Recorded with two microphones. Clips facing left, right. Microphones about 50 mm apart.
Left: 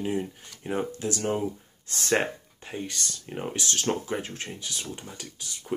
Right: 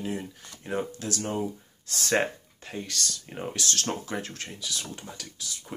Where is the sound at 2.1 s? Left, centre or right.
Centre.